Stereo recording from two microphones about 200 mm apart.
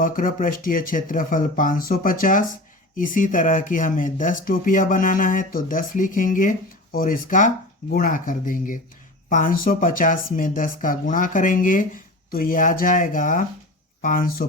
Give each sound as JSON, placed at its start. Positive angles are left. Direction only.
{"t": 0.0, "sound": "speech", "side_deg": 40}